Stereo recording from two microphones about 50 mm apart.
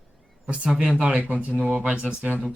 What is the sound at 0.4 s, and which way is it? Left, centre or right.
Speech, right.